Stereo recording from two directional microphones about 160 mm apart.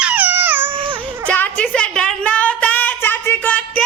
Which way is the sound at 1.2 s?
10° left (ahead or behind).